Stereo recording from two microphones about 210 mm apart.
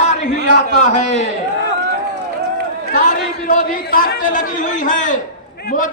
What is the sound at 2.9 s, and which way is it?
A man's voice, 40° left (ahead or behind).